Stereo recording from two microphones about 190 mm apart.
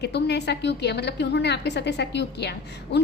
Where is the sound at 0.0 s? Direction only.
60° left (ahead or behind).